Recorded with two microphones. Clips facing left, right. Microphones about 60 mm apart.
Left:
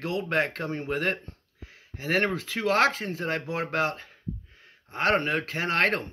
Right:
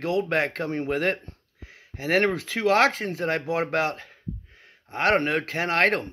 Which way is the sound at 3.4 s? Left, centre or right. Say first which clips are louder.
Right 5 dB; centre.